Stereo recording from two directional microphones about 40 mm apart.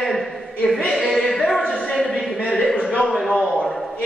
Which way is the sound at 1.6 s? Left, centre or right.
Left.